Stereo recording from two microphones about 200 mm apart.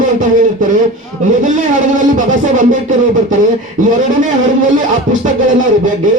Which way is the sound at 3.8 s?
40° right (ahead or behind).